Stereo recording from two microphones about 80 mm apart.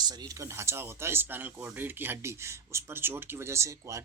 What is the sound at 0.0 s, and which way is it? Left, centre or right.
Speech, right.